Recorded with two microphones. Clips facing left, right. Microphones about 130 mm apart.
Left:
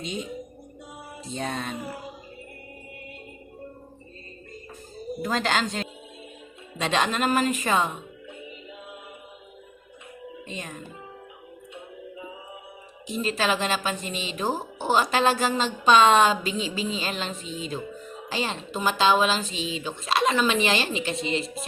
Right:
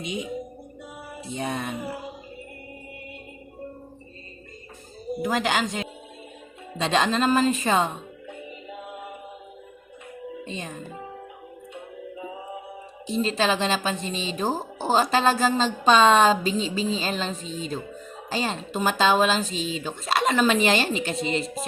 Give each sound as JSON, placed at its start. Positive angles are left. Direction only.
{"t": 0.0, "sound": "speech", "side_deg": -10}
{"t": 1.3, "sound": "speech", "side_deg": -15}
{"t": 5.2, "sound": "speech", "side_deg": -10}
{"t": 6.7, "sound": "speech", "side_deg": -30}
{"t": 10.4, "sound": "speech", "side_deg": -30}
{"t": 13.1, "sound": "speech", "side_deg": -30}
{"t": 15.8, "sound": "music", "side_deg": -35}